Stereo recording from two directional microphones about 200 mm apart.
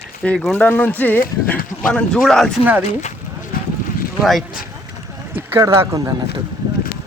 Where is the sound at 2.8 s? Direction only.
35° left (ahead or behind).